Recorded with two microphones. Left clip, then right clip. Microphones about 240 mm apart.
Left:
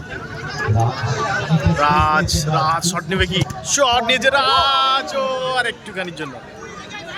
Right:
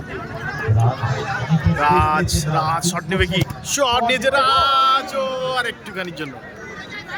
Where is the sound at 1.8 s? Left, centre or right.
Centre.